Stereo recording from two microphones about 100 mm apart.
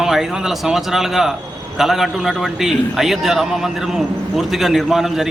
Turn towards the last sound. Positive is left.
turn(degrees=-5)  # may be behind; listen again after turning